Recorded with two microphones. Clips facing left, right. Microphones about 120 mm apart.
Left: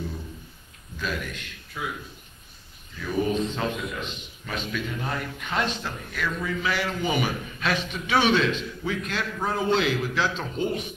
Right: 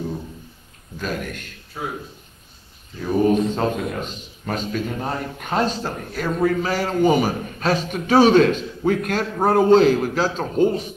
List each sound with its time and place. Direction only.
0.9 s a man's voice: 45° right (ahead or behind)
3.0 s a man's voice: 35° right (ahead or behind)
3.3 s a man's voice: 50° right (ahead or behind)
9.4 s a man's voice: 50° right (ahead or behind)